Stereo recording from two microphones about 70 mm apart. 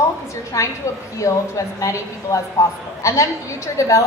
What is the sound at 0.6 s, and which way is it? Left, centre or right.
A woman's voice, left.